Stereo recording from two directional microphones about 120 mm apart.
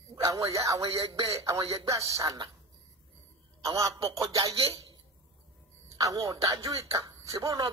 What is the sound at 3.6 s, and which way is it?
Speech, 30° right (ahead or behind).